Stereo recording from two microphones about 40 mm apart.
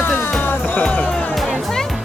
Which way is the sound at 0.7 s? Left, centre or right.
Left.